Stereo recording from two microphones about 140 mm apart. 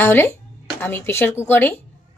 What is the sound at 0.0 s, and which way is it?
A woman's voice, 15° left (ahead or behind).